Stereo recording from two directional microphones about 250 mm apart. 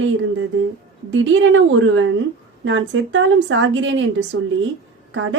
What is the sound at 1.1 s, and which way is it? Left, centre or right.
Speech, right.